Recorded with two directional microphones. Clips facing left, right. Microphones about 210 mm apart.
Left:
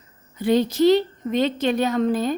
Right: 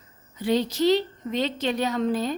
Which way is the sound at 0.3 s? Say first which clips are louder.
Left 5 dB; 50° left (ahead or behind).